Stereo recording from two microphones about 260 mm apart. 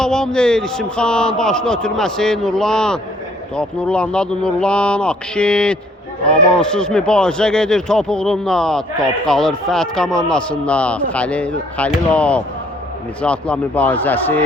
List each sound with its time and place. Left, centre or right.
0.0 s a man's voice: centre